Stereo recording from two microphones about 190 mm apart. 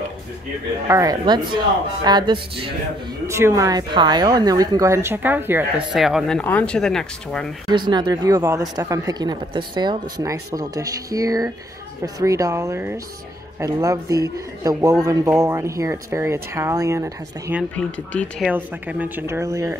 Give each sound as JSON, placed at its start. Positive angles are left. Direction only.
{"t": 0.8, "sound": "speech", "side_deg": -15}
{"t": 3.3, "sound": "speech", "side_deg": -15}
{"t": 7.6, "sound": "speech", "side_deg": -20}
{"t": 17.7, "sound": "speech", "side_deg": 5}
{"t": 18.5, "sound": "speech", "side_deg": -10}